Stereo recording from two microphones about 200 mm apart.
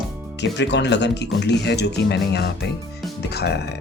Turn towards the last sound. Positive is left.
turn(degrees=55)  # may be behind; listen again after turning